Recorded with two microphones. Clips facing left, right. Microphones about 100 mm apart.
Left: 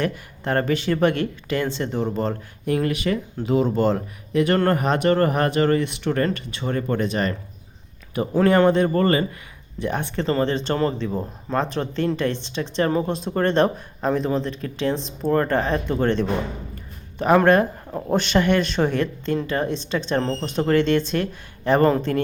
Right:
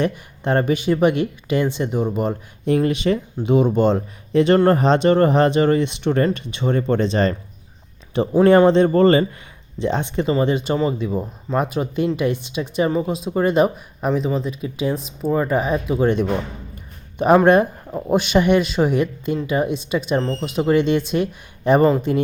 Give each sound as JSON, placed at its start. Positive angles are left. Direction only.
{"t": 0.0, "sound": "speech", "side_deg": -20}
{"t": 2.6, "sound": "speech", "side_deg": -25}
{"t": 8.4, "sound": "speech", "side_deg": -25}